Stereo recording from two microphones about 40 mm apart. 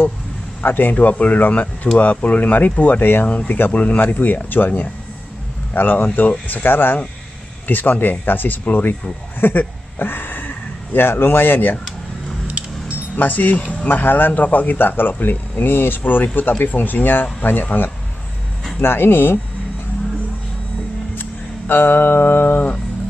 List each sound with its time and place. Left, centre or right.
0.6 s speech: left
3.5 s speech: left
3.8 s speech: left
7.6 s speech: left
9.4 s speech: left
13.1 s speech: left
13.6 s speech: left
13.8 s speech: left
16.0 s speech: left
18.8 s speech: left
21.2 s music: left